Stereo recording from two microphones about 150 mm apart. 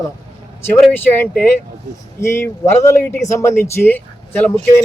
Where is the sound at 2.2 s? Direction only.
15° left (ahead or behind).